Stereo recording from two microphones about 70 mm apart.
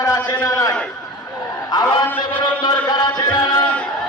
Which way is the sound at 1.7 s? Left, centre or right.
Left.